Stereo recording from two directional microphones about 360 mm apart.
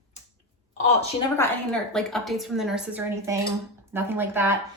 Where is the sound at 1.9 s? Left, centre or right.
Centre.